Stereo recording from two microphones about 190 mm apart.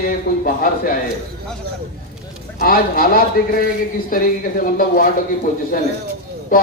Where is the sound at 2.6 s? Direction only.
50° left (ahead or behind).